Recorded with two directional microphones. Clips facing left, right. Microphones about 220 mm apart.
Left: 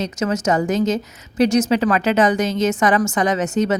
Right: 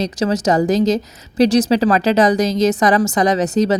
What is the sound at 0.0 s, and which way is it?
A woman's voice, 35° right (ahead or behind).